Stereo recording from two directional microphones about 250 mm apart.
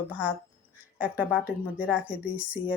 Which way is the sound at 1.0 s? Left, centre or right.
Centre.